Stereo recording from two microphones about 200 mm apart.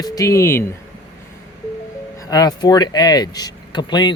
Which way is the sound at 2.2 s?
20° left (ahead or behind).